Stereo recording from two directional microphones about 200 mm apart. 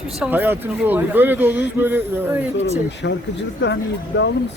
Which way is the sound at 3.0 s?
60° left (ahead or behind).